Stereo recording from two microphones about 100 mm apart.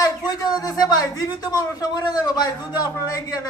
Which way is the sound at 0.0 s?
40° left (ahead or behind).